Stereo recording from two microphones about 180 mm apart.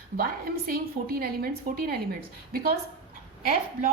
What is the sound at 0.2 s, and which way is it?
A woman's voice, 55° right (ahead or behind).